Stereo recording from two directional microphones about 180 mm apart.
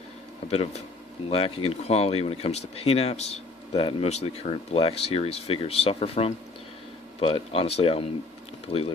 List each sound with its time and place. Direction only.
0.5 s speech: 35° left (ahead or behind)